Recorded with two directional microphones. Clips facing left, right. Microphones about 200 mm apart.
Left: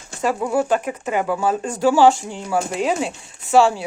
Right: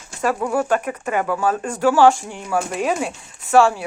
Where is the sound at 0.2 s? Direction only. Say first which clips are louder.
Even; 10° left (ahead or behind).